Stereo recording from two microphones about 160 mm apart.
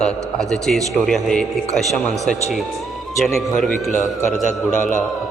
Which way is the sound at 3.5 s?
50° left (ahead or behind).